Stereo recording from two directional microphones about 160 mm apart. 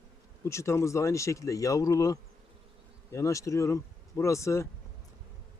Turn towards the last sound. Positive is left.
turn(degrees=20)  # may be behind; listen again after turning